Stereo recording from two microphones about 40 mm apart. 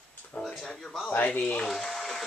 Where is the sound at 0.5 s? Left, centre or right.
Centre.